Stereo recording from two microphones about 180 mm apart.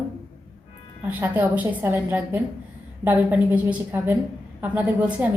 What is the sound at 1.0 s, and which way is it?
A woman's voice, 10° right (ahead or behind).